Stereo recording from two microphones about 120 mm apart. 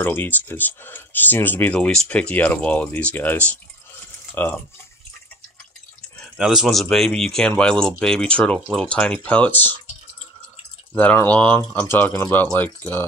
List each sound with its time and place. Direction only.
0.0 s speech: 15° left (ahead or behind)
6.3 s speech: 5° right (ahead or behind); by 9.8 s 15° left (ahead or behind)
11.0 s speech: 15° left (ahead or behind)